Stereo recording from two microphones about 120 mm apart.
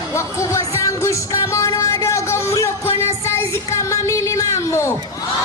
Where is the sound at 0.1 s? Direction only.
25° left (ahead or behind).